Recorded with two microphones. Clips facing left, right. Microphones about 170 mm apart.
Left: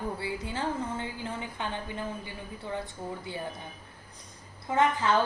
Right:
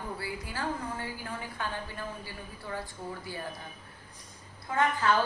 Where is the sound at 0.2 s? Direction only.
25° left (ahead or behind).